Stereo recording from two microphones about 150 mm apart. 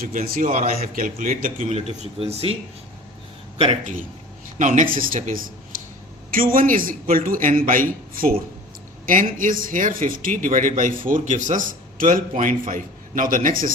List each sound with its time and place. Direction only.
0.0 s speech: 65° right (ahead or behind)
0.9 s speech: 65° right (ahead or behind)
1.5 s speech: 45° right (ahead or behind)
4.5 s a man's voice: 55° right (ahead or behind); by 8.4 s 70° right (ahead or behind)
9.4 s speech: 65° right (ahead or behind)